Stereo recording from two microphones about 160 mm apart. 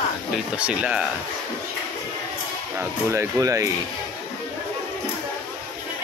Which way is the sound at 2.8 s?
15° right (ahead or behind).